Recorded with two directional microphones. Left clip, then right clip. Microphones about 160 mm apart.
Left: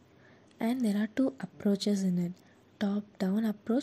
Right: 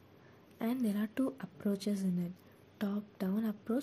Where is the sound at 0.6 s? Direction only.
25° left (ahead or behind).